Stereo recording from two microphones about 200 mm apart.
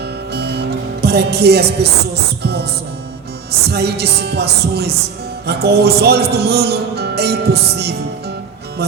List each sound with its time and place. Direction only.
0.3 s music: 55° right (ahead or behind)
3.7 s music: 55° right (ahead or behind)